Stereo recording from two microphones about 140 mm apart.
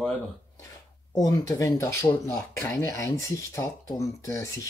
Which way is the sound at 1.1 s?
25° left (ahead or behind).